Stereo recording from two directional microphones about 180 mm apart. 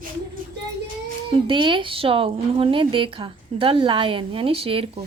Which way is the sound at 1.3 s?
30° right (ahead or behind).